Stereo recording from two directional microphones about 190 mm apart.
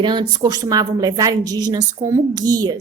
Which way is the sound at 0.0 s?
25° right (ahead or behind).